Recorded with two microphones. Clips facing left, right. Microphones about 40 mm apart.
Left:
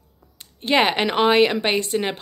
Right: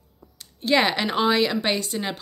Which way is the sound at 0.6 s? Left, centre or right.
Left.